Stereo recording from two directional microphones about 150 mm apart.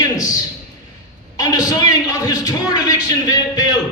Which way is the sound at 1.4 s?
25° left (ahead or behind).